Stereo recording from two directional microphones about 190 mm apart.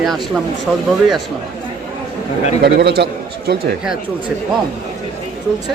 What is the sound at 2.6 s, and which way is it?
Speech, 60° right (ahead or behind).